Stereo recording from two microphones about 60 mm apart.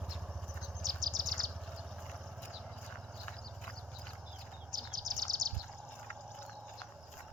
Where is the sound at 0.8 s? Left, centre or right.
Right.